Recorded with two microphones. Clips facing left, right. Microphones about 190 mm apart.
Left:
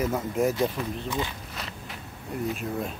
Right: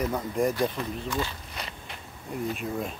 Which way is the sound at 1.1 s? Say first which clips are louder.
Right 1 dB; 15° left (ahead or behind).